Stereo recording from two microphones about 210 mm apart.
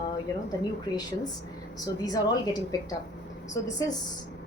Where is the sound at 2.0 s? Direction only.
20° left (ahead or behind).